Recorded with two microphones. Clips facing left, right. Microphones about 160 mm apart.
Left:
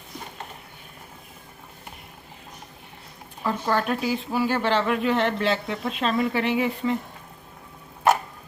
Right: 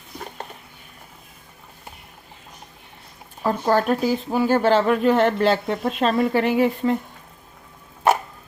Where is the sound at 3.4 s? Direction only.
40° right (ahead or behind).